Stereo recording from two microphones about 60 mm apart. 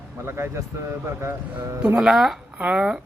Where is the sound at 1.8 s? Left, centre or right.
Centre.